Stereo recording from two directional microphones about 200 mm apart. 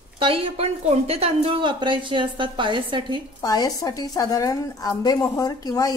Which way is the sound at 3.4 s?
20° left (ahead or behind).